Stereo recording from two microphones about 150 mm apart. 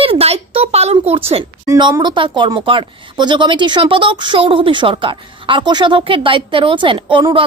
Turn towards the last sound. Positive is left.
turn(degrees=-35)  # may be behind; listen again after turning